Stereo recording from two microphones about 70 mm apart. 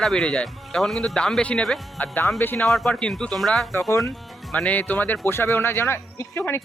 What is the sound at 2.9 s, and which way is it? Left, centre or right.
Speech, centre.